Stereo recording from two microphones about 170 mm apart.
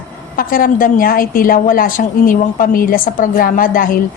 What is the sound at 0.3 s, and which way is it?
A woman's voice, 55° left (ahead or behind).